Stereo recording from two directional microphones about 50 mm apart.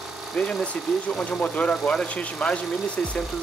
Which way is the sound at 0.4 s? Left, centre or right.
Centre.